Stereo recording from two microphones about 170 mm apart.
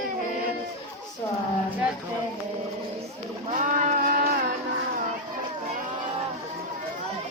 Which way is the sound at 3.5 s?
50° right (ahead or behind).